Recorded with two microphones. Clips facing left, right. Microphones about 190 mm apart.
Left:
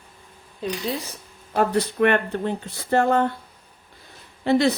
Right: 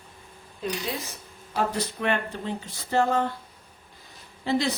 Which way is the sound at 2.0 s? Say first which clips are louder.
Left 8 dB; 60° left (ahead or behind).